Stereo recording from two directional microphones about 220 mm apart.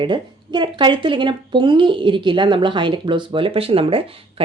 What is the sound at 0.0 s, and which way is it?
Speech, 20° right (ahead or behind).